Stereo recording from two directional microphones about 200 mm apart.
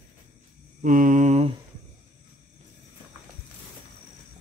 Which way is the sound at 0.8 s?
40° right (ahead or behind).